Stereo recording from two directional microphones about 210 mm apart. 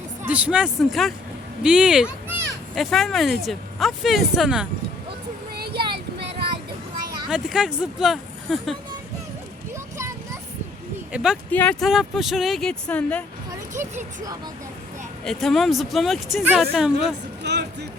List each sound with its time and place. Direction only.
0.2 s speech: 5° right (ahead or behind)
5.5 s a sound: 50° right (ahead or behind)
7.3 s speech: 5° right (ahead or behind)
9.7 s a sound: 15° right (ahead or behind)
11.1 s speech: 5° right (ahead or behind)
15.2 s speech: centre (ahead or behind)
17.4 s music: 55° right (ahead or behind)